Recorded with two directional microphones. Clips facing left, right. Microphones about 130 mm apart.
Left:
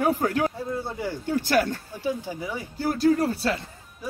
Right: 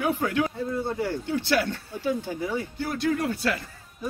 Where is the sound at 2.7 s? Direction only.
35° left (ahead or behind).